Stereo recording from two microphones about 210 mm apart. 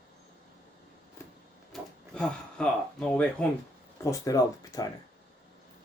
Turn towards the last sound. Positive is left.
turn(degrees=15)  # may be behind; listen again after turning